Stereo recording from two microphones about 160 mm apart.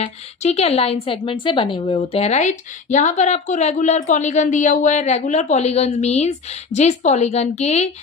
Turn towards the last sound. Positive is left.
turn(degrees=45)  # may be behind; listen again after turning